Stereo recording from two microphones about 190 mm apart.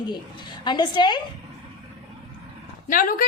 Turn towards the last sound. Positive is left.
turn(degrees=45)  # may be behind; listen again after turning